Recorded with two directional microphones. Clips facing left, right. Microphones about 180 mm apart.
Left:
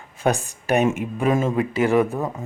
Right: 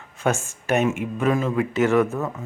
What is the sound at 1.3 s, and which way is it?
Speech, 25° left (ahead or behind).